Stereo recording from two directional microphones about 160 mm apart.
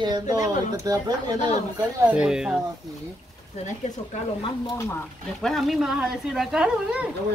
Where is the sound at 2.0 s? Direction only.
5° right (ahead or behind).